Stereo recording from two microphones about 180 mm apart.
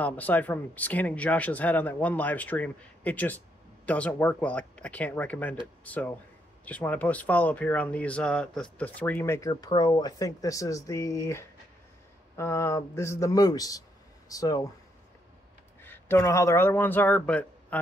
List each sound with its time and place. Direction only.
0.0 s speech: 10° left (ahead or behind)
15.8 s speech: 10° left (ahead or behind)